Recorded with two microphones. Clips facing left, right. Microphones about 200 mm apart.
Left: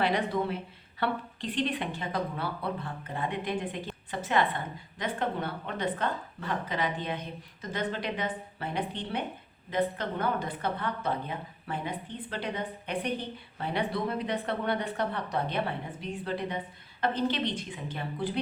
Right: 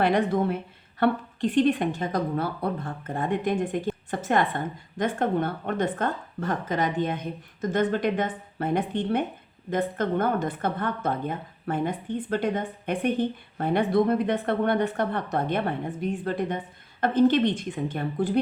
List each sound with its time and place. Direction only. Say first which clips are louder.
0.0 s a woman's voice: right 6 dB; 50° right (ahead or behind)